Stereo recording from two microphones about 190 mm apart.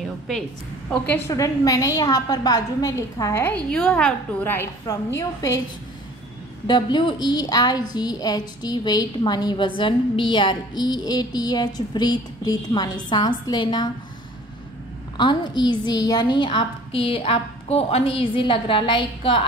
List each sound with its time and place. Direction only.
0.8 s a woman's voice: 10° left (ahead or behind)
6.7 s a woman's voice: 25° left (ahead or behind)
15.1 s a woman's voice: 25° left (ahead or behind)